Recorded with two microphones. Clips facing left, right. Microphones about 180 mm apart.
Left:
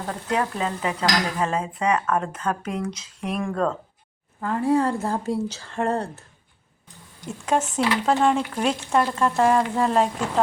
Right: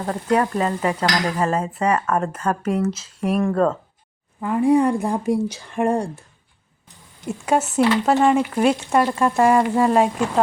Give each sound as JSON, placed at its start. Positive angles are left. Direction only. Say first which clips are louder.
{"t": 0.3, "sound": "speech", "louder": "right 5 dB", "side_deg": -50}
{"t": 0.9, "sound": "speech", "louder": "right 2 dB", "side_deg": -10}
{"t": 7.3, "sound": "speech", "louder": "right 3 dB", "side_deg": -10}